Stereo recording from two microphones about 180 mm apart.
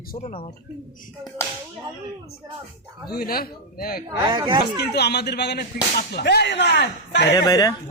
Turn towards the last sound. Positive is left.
turn(degrees=20)  # may be behind; listen again after turning